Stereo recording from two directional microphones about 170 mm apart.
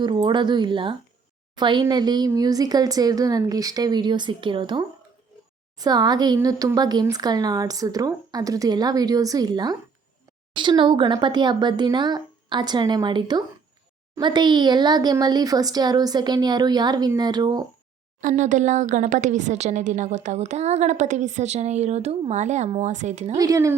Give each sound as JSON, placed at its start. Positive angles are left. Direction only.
{"t": 0.0, "sound": "speech", "side_deg": -25}
{"t": 18.2, "sound": "speech", "side_deg": -45}
{"t": 23.4, "sound": "speech", "side_deg": -20}